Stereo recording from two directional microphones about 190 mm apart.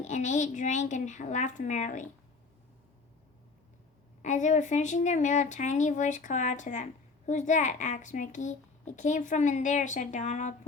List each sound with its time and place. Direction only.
0.0 s a child's voice: 40° left (ahead or behind)
4.2 s a child's voice: 40° left (ahead or behind)